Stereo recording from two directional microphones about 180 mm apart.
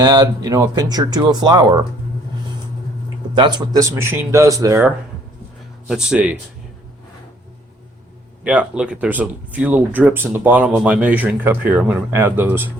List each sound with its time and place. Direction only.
0.0 s speech: 20° right (ahead or behind)
3.3 s speech: 25° right (ahead or behind)
5.9 s speech: 5° right (ahead or behind)
8.4 s speech: 5° right (ahead or behind)